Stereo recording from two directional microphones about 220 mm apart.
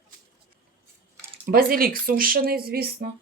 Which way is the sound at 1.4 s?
40° right (ahead or behind).